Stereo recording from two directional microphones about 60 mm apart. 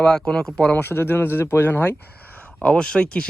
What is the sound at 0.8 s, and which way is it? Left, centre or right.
Speech, left.